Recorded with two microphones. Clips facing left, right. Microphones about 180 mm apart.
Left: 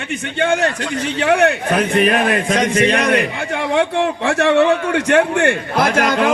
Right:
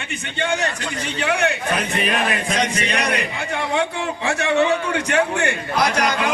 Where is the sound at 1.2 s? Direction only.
50° left (ahead or behind).